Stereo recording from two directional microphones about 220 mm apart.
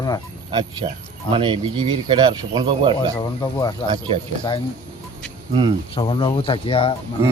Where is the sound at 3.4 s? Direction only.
15° left (ahead or behind).